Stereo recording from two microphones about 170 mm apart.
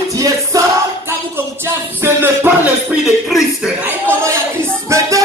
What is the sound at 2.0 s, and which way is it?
Music, 10° right (ahead or behind).